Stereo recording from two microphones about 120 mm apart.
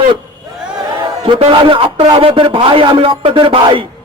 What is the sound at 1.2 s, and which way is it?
A man's voice, 50° right (ahead or behind).